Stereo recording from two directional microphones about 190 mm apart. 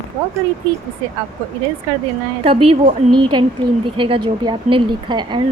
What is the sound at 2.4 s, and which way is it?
Speech, 30° right (ahead or behind).